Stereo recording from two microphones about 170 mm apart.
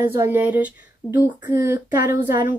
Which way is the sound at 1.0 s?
10° left (ahead or behind).